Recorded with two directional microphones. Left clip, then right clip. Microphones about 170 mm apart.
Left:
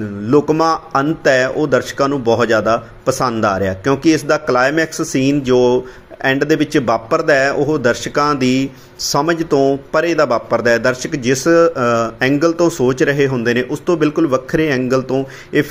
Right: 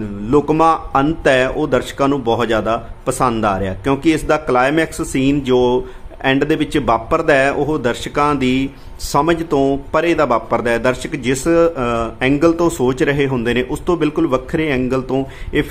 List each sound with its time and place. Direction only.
0.3 s a man's voice: centre (ahead or behind)